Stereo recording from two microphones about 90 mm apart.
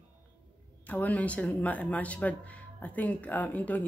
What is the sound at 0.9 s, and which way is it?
Speech, 15° left (ahead or behind).